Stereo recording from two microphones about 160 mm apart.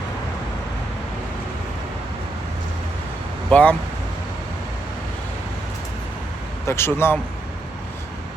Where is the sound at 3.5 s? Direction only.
10° left (ahead or behind).